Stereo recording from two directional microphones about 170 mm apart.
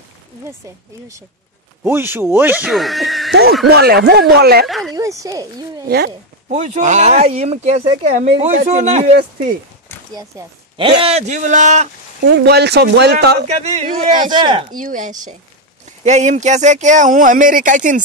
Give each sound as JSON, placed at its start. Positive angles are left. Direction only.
{"t": 1.9, "sound": "speech", "side_deg": -10}
{"t": 3.6, "sound": "speech", "side_deg": -70}
{"t": 4.6, "sound": "speech", "side_deg": 0}
{"t": 4.9, "sound": "speech", "side_deg": -20}
{"t": 5.9, "sound": "speech", "side_deg": -75}
{"t": 6.5, "sound": "a man's voice", "side_deg": -45}
{"t": 10.1, "sound": "speech", "side_deg": -20}
{"t": 11.1, "sound": "speech", "side_deg": -40}
{"t": 12.3, "sound": "speech", "side_deg": -75}
{"t": 13.5, "sound": "a man's voice", "side_deg": -40}
{"t": 14.3, "sound": "speech", "side_deg": -30}
{"t": 14.8, "sound": "speech", "side_deg": -50}